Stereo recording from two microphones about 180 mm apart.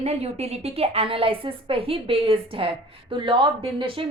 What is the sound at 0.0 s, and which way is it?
A woman's voice, 35° right (ahead or behind).